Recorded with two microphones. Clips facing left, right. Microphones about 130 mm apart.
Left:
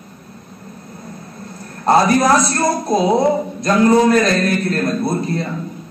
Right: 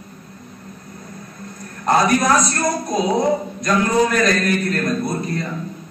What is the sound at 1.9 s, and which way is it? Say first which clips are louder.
A man's voice: left 3 dB; 30° left (ahead or behind).